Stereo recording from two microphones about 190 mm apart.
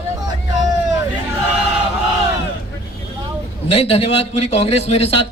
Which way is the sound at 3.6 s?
30° left (ahead or behind).